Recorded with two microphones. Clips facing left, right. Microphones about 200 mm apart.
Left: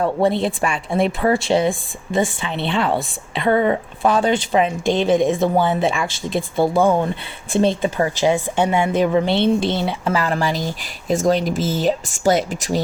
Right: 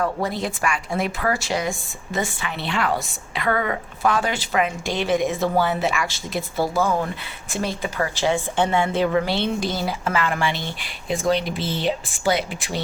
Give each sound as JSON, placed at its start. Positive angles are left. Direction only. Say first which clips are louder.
{"t": 0.0, "sound": "a woman's voice", "louder": "left 6 dB", "side_deg": 25}